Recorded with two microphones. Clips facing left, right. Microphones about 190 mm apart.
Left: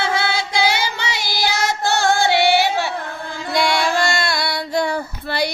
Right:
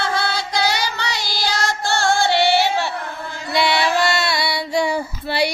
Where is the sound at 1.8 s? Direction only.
20° left (ahead or behind).